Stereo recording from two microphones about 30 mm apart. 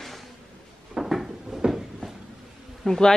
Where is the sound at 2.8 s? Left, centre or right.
Centre.